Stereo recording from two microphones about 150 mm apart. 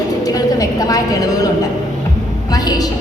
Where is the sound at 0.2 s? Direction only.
25° left (ahead or behind).